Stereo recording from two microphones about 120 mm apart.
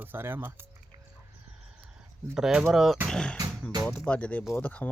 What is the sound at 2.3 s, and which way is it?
Speech, 5° right (ahead or behind).